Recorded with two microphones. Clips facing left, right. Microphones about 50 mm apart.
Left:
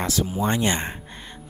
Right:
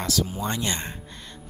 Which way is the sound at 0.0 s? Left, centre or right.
Left.